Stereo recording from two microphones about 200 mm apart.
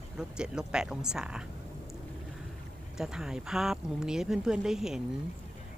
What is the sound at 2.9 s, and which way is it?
A woman's voice, 5° right (ahead or behind).